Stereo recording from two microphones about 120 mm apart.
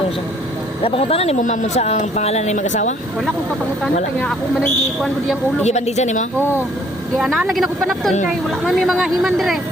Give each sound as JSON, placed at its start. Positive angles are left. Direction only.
{"t": 0.9, "sound": "speech", "side_deg": 55}
{"t": 4.2, "sound": "speech", "side_deg": 5}
{"t": 5.6, "sound": "speech", "side_deg": 70}
{"t": 7.2, "sound": "speech", "side_deg": 0}